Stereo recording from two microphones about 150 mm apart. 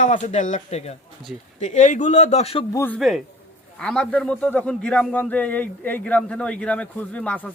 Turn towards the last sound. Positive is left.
turn(degrees=10)  # may be behind; listen again after turning